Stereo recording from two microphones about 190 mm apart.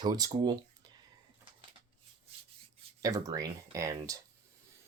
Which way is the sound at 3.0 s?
20° right (ahead or behind).